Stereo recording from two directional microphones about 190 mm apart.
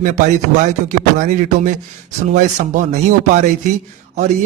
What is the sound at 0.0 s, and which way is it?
Speech, 40° right (ahead or behind).